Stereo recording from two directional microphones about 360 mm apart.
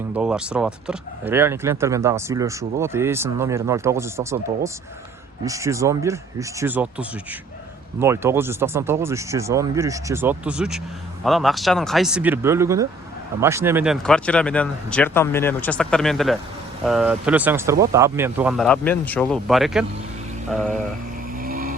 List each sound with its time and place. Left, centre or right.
0.1 s speech: centre
21.3 s vehicle: right